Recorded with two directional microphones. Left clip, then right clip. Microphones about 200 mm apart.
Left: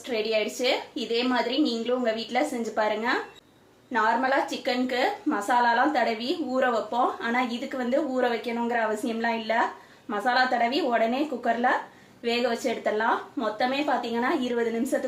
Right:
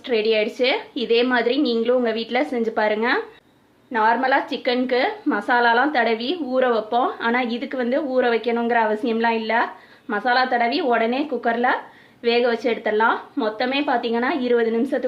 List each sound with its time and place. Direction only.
0.1 s a woman's voice: 45° right (ahead or behind)